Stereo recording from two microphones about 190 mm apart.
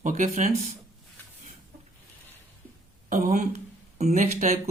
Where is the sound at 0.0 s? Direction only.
40° right (ahead or behind).